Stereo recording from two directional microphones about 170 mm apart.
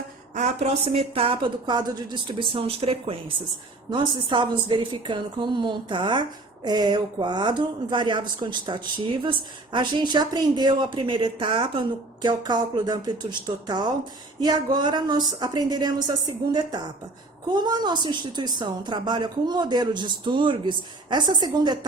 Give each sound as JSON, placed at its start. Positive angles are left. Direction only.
{"t": 0.3, "sound": "a woman's voice", "side_deg": -40}